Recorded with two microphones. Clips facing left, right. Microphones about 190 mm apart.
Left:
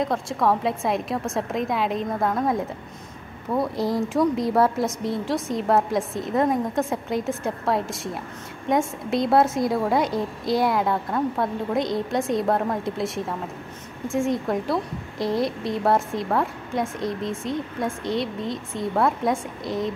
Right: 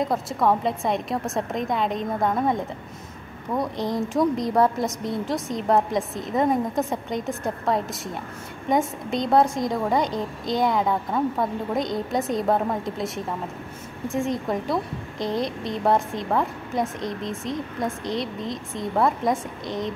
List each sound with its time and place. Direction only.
0.0 s a woman's voice: centre (ahead or behind)